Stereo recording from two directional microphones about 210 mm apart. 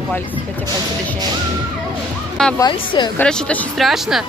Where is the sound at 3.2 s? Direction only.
5° left (ahead or behind).